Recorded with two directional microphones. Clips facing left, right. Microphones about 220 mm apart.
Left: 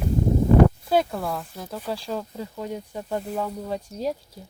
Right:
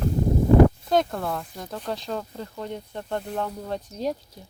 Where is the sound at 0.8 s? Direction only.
5° left (ahead or behind).